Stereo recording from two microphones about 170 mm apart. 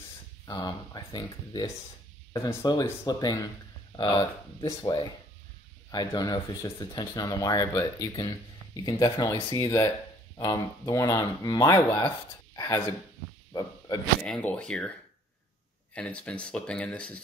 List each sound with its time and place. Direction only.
0.5 s speech: 25° left (ahead or behind)
14.2 s speech: 5° left (ahead or behind)
15.9 s speech: 5° left (ahead or behind)